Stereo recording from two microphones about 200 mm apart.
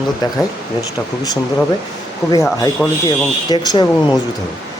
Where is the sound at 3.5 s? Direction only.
20° left (ahead or behind).